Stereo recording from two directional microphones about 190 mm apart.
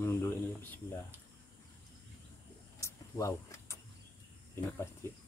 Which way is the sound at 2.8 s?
15° left (ahead or behind).